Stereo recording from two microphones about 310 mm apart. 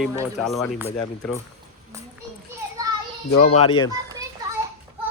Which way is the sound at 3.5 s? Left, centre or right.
Centre.